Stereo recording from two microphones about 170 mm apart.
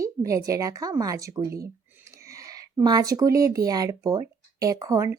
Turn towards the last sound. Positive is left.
turn(degrees=-20)  # may be behind; listen again after turning